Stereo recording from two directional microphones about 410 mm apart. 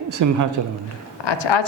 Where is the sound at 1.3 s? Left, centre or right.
Left.